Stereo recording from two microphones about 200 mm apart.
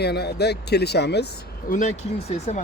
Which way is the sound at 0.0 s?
55° left (ahead or behind).